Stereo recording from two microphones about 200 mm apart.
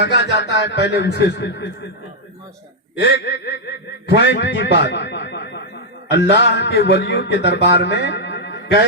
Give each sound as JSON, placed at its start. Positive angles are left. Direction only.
{"t": 0.0, "sound": "a man's voice", "side_deg": 60}
{"t": 3.0, "sound": "a man's voice", "side_deg": 60}